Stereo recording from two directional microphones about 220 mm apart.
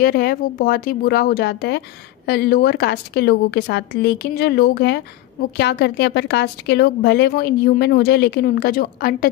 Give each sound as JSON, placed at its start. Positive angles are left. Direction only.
{"t": 0.0, "sound": "speech", "side_deg": 45}